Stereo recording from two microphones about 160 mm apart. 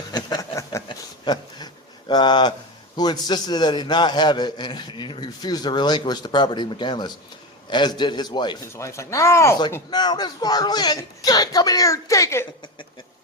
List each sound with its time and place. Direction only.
0.1 s a sound: 25° left (ahead or behind)
0.9 s speech: 25° left (ahead or behind)
8.7 s speech: 20° left (ahead or behind)